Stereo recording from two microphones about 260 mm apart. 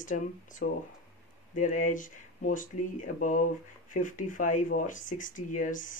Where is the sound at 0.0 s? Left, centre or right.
Left.